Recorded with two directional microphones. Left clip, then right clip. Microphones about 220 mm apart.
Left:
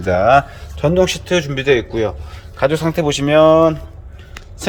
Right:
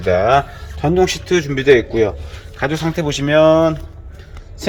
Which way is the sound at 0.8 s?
10° left (ahead or behind).